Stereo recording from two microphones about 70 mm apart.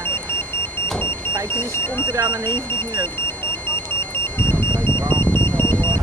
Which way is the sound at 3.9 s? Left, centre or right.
Left.